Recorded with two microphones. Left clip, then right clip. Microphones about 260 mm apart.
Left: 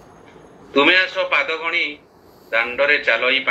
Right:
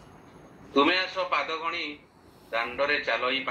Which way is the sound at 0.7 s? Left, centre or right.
Left.